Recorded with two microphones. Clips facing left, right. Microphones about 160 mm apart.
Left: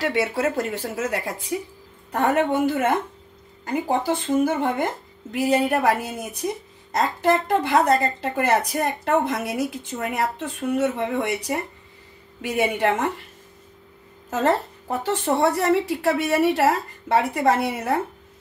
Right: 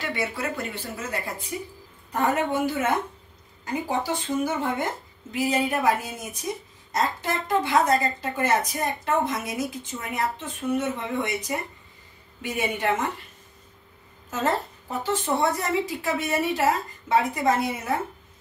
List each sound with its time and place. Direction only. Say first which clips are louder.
0.0 s a woman's voice: left 7 dB; 90° left
2.2 s a woman's voice: left 4 dB; 60° left (ahead or behind)
14.3 s speech: left 5 dB; 65° left (ahead or behind)